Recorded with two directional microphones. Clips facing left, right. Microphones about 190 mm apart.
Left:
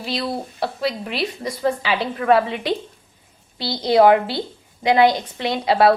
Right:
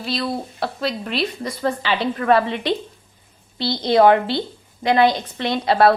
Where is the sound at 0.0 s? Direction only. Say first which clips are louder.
Right 1 dB; 15° left (ahead or behind).